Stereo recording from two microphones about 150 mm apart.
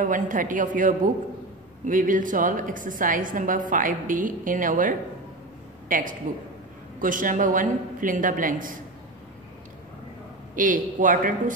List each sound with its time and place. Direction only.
0.0 s a woman's voice: 65° right (ahead or behind)
10.5 s a woman's voice: 60° right (ahead or behind)